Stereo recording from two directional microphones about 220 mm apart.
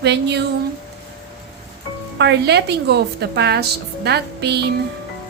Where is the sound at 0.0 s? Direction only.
50° right (ahead or behind).